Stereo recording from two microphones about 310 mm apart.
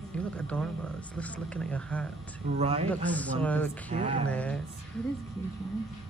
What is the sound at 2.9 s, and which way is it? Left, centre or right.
Speech, centre.